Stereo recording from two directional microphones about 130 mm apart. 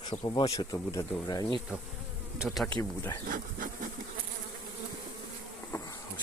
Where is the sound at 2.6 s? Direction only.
15° left (ahead or behind).